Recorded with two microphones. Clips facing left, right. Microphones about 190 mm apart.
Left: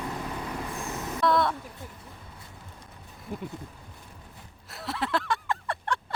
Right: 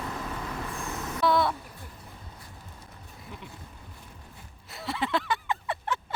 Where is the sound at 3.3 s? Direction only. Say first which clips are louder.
Left 9 dB; 45° left (ahead or behind).